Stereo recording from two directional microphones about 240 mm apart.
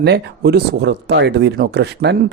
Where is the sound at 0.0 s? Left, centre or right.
Right.